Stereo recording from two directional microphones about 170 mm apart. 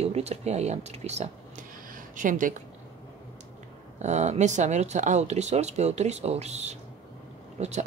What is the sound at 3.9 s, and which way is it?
Speech, 45° right (ahead or behind).